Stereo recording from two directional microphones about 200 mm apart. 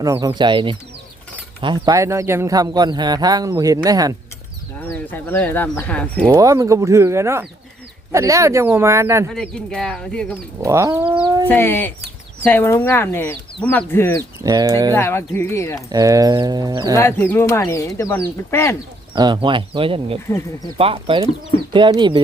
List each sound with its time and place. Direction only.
0.0 s speech: 15° right (ahead or behind)
4.9 s speech: 10° left (ahead or behind)
6.2 s speech: 15° right (ahead or behind)
9.3 s speech: 5° left (ahead or behind)
10.6 s speech: 15° right (ahead or behind)
11.4 s speech: 10° left (ahead or behind)
14.4 s speech: 20° right (ahead or behind)
14.9 s speech: 10° left (ahead or behind)
15.9 s speech: 15° right (ahead or behind)
16.9 s speech: 10° left (ahead or behind)
19.1 s speech: 20° right (ahead or behind)